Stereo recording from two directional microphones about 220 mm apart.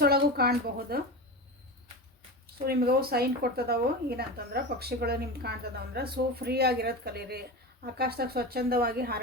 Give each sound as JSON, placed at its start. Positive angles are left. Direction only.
{"t": 0.0, "sound": "speech", "side_deg": -45}
{"t": 2.6, "sound": "speech", "side_deg": -45}